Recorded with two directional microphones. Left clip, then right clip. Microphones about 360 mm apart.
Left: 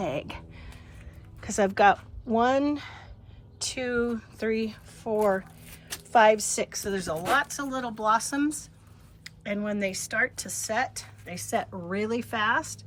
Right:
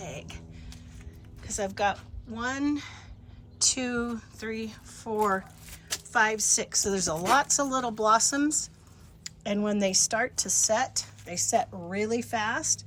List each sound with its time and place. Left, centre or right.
0.0 s a sound: centre
1.5 s speech: centre
2.4 s speech: centre